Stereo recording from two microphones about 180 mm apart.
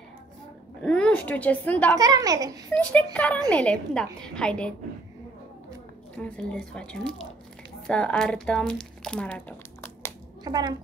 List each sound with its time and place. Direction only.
0.8 s speech: 5° left (ahead or behind)
2.0 s a child's voice: 20° right (ahead or behind)
2.7 s a woman's voice: 5° left (ahead or behind)
6.1 s speech: 5° left (ahead or behind)
10.4 s a woman's voice: 25° right (ahead or behind)